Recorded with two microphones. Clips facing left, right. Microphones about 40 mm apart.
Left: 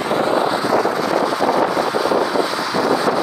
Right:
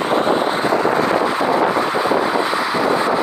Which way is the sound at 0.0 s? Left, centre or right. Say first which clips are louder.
Right 1 dB; right.